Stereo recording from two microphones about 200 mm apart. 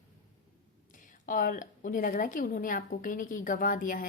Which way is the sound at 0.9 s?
40° left (ahead or behind).